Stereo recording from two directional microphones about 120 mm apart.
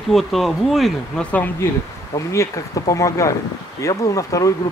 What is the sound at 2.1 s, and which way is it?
Speech, 25° left (ahead or behind).